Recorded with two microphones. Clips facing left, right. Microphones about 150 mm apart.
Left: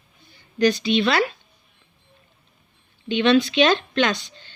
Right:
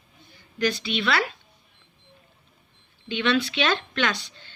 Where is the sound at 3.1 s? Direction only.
25° left (ahead or behind).